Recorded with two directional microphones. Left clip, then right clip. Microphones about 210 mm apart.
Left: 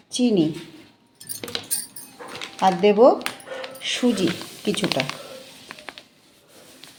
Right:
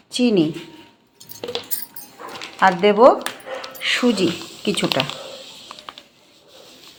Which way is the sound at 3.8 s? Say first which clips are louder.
Right 4 dB; centre (ahead or behind).